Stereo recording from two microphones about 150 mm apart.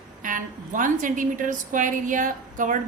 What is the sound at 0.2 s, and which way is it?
A woman's voice, 60° right (ahead or behind).